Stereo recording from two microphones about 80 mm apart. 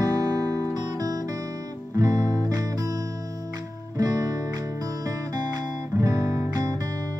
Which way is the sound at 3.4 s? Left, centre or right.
Right.